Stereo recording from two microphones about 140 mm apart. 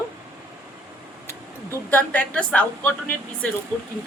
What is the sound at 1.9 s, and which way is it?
Speech, 10° left (ahead or behind).